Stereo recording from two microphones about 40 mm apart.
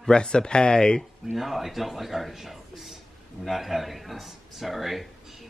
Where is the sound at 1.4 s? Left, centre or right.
Centre.